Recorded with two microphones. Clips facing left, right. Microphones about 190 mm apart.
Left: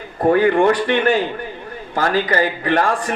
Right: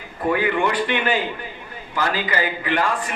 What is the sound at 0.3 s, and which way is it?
A man's voice, 45° left (ahead or behind).